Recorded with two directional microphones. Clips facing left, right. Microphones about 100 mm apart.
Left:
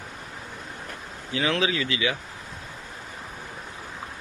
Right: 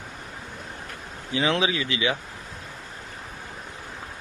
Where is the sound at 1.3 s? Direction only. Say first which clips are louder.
Right 1 dB; 20° right (ahead or behind).